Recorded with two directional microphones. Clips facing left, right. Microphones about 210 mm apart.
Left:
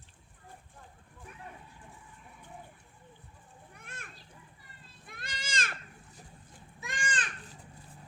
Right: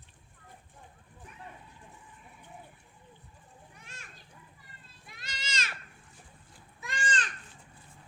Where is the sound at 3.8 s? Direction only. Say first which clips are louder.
Left 3 dB; 55° left (ahead or behind).